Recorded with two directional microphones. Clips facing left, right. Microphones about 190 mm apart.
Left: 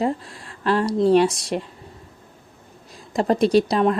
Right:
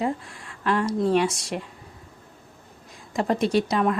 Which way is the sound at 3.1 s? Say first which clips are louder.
Left 5 dB; 35° left (ahead or behind).